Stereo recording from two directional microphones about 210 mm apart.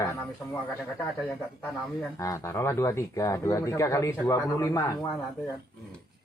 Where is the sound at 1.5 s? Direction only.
10° left (ahead or behind).